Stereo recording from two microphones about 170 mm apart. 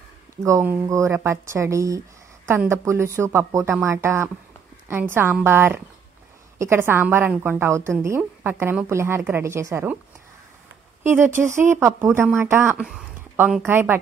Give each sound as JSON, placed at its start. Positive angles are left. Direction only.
{"t": 0.4, "sound": "a woman's voice", "side_deg": -15}
{"t": 11.1, "sound": "a woman's voice", "side_deg": -15}